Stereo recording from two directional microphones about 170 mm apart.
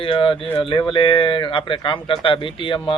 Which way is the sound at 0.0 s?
30° left (ahead or behind).